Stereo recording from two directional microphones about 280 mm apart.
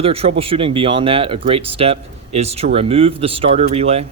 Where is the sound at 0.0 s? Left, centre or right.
Right.